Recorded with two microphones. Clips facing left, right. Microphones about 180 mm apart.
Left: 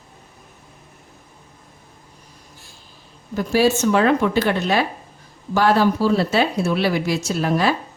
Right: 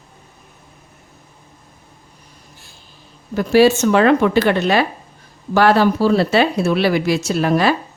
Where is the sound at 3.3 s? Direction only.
75° right (ahead or behind).